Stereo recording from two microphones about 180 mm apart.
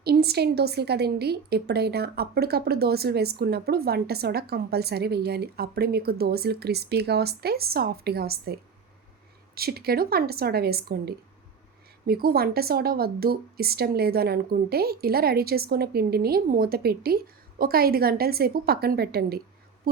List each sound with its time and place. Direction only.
0.0 s a woman's voice: 60° right (ahead or behind)
9.6 s a woman's voice: 60° right (ahead or behind)